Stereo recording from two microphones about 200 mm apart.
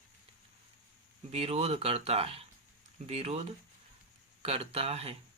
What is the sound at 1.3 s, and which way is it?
Speech, 30° right (ahead or behind).